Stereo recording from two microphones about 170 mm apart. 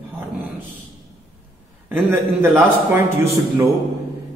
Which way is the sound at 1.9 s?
10° right (ahead or behind).